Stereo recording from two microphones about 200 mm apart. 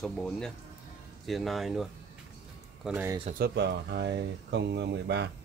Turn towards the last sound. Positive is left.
turn(degrees=-60)  # may be behind; listen again after turning